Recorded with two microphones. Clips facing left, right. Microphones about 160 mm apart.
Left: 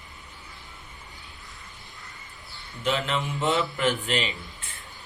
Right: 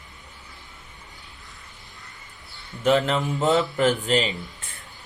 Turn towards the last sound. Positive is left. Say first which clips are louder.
# right 5 dB
turn(degrees=-40)  # may be behind; listen again after turning